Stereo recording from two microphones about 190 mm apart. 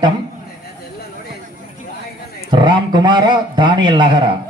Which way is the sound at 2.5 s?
25° right (ahead or behind).